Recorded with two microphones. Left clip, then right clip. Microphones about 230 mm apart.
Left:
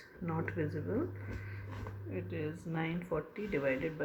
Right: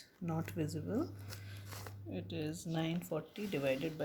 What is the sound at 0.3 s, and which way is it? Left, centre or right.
Speech, right.